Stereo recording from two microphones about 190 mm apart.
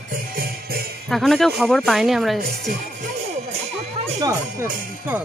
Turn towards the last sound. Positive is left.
turn(degrees=-10)  # may be behind; listen again after turning